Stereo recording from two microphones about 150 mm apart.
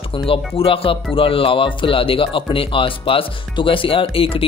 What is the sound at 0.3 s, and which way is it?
Speech, 40° left (ahead or behind).